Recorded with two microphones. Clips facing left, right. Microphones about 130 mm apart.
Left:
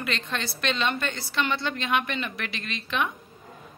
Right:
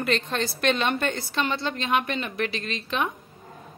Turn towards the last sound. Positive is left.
turn(degrees=-35)  # may be behind; listen again after turning